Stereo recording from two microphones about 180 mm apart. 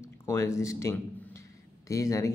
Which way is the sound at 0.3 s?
15° left (ahead or behind).